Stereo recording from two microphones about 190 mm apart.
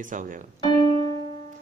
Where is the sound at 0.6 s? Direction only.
20° left (ahead or behind).